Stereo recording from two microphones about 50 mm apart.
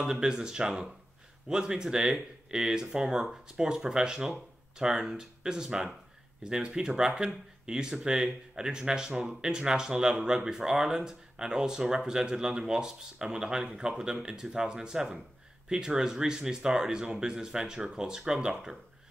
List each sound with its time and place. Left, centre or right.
0.0 s speech: centre